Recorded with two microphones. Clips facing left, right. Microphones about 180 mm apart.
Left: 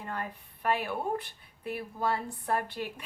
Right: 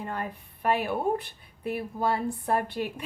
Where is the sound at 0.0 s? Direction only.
20° right (ahead or behind).